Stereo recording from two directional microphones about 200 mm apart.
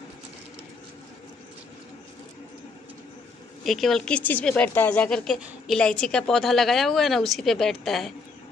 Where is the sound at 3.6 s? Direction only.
Centre (ahead or behind).